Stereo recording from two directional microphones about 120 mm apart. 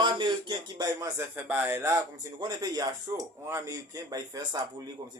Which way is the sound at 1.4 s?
15° right (ahead or behind).